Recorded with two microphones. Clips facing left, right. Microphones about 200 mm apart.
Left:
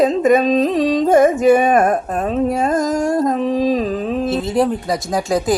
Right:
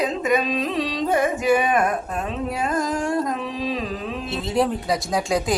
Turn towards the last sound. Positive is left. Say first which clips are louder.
# left 5 dB
turn(degrees=0)  # may be behind; listen again after turning